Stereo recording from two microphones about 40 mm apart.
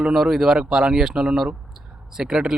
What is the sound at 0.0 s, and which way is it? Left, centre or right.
Speech, centre.